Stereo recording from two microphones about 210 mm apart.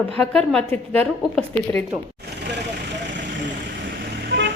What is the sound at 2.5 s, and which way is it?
Vehicle, 55° right (ahead or behind).